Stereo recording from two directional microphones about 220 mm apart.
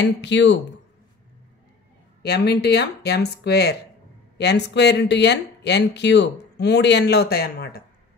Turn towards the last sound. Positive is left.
turn(degrees=45)  # may be behind; listen again after turning